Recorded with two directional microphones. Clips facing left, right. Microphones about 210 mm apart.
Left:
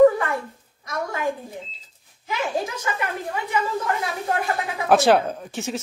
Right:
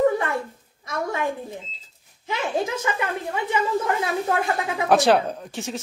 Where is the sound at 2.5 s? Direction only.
25° right (ahead or behind).